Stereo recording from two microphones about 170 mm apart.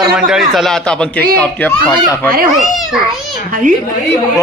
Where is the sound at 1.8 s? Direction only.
25° left (ahead or behind).